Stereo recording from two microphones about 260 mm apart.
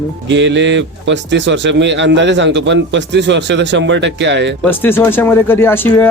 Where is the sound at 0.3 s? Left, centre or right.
Right.